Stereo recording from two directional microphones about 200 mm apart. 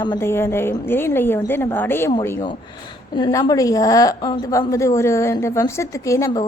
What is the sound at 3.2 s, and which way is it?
A woman's voice, 25° left (ahead or behind).